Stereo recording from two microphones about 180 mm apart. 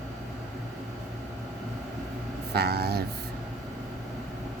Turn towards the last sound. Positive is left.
turn(degrees=-60)  # may be behind; listen again after turning